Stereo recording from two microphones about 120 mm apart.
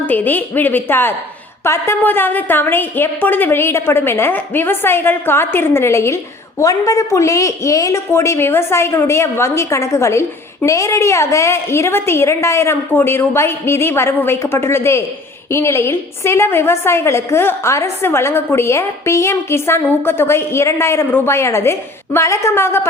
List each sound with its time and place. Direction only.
0.0 s a woman's voice: 15° left (ahead or behind)